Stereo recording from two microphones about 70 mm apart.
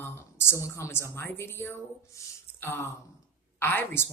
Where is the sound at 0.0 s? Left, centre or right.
Left.